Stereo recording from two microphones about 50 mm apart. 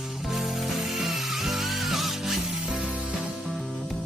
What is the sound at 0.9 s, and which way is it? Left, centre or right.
Music, centre.